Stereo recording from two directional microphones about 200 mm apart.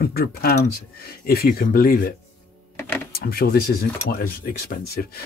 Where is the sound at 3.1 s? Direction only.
50° left (ahead or behind).